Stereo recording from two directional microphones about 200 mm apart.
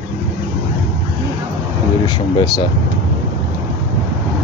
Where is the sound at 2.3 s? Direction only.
20° left (ahead or behind).